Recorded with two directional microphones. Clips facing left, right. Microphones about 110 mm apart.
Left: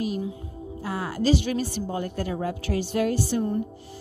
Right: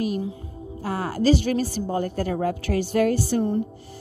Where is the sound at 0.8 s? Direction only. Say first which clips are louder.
Right 3 dB; 45° right (ahead or behind).